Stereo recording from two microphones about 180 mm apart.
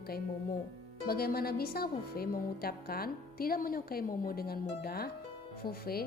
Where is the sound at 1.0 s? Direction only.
60° left (ahead or behind).